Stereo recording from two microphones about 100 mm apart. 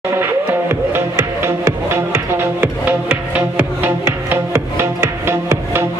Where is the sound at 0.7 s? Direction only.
25° right (ahead or behind).